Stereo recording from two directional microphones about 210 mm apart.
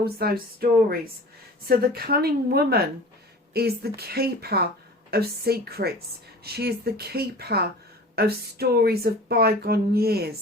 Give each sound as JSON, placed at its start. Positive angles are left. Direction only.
{"t": 0.0, "sound": "speech", "side_deg": -45}